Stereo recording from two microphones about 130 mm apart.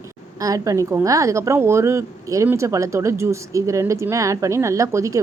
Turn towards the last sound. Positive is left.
turn(degrees=-25)  # may be behind; listen again after turning